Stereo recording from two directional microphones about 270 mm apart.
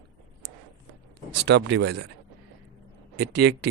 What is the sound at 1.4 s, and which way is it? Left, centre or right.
Speech, right.